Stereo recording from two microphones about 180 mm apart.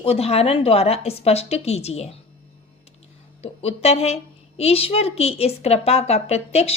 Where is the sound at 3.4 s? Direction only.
35° left (ahead or behind).